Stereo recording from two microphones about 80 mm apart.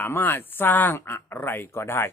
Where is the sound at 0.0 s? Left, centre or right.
Left.